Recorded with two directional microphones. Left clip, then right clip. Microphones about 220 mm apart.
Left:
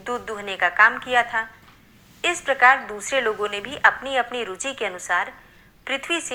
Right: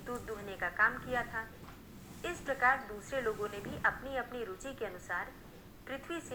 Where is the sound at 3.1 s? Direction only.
60° left (ahead or behind).